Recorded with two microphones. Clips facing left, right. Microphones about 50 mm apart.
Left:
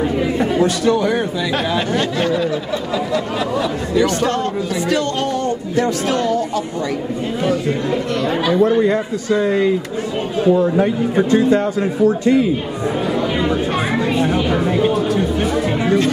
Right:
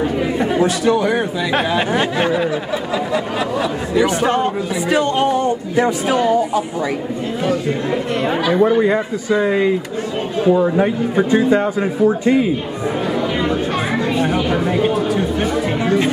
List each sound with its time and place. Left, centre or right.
0.0 s speech: centre
1.7 s a sound: centre
7.9 s speech: right
13.0 s chatter: centre
14.2 s speech: centre